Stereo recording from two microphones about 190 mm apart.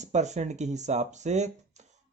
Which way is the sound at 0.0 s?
35° right (ahead or behind).